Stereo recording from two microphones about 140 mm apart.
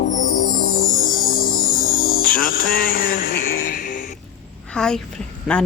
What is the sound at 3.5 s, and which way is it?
Music, 70° left (ahead or behind).